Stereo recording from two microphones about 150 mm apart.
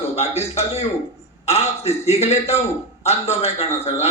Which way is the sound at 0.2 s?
45° left (ahead or behind).